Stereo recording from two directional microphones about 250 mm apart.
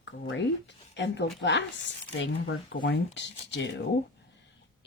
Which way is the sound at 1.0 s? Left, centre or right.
Left.